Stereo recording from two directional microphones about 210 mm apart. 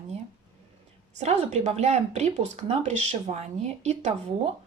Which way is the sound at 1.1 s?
30° right (ahead or behind).